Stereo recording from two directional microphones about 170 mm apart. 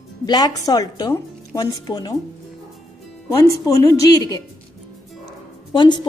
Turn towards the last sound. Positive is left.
turn(degrees=25)  # may be behind; listen again after turning